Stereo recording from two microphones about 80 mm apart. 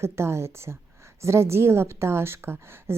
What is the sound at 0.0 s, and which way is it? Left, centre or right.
A woman's voice, right.